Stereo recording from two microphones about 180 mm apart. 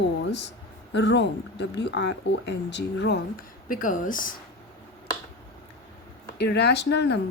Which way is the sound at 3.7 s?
50° left (ahead or behind).